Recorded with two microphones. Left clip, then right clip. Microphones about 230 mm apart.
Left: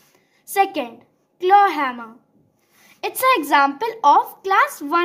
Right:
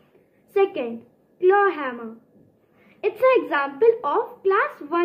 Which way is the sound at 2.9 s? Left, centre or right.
Left.